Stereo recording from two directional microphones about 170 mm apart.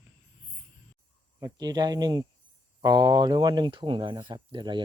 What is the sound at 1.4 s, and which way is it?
Speech, 20° right (ahead or behind).